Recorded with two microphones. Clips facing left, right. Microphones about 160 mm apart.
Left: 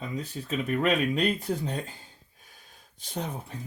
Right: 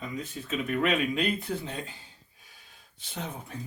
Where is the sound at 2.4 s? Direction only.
45° left (ahead or behind).